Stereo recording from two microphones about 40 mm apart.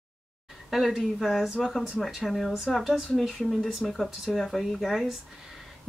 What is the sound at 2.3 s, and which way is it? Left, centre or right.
A woman's voice, centre.